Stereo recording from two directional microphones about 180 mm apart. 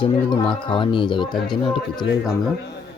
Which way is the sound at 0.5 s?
25° left (ahead or behind).